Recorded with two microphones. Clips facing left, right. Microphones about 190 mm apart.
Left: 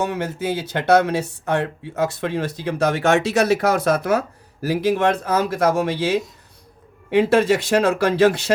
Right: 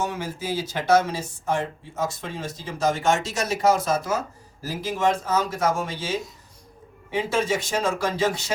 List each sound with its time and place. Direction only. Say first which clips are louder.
0.0 s speech: left 5 dB; 65° left (ahead or behind)